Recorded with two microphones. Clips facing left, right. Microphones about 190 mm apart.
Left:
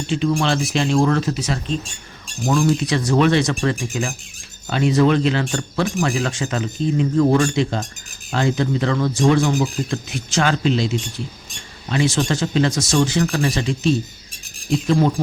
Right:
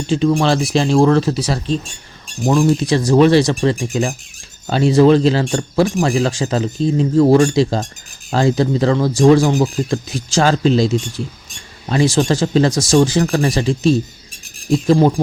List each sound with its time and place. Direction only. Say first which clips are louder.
0.1 s speech: right 5 dB; 35° right (ahead or behind)